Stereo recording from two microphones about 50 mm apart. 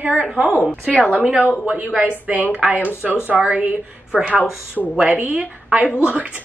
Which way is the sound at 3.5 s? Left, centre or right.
Right.